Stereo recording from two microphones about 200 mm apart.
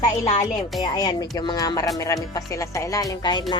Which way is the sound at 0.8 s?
20° left (ahead or behind).